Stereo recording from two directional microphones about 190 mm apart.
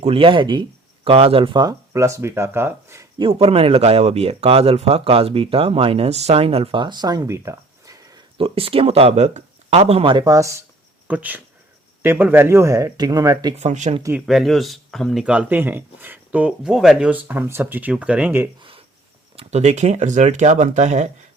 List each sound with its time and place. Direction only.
0.0 s speech: 30° right (ahead or behind); by 3.1 s 15° right (ahead or behind)
3.2 s speech: 30° right (ahead or behind)
8.4 s speech: 30° right (ahead or behind)
13.6 s speech: 35° right (ahead or behind)
14.3 s speech: centre (ahead or behind)
19.4 s speech: 35° right (ahead or behind)